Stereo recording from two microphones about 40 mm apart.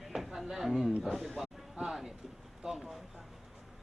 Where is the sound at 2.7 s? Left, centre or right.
Centre.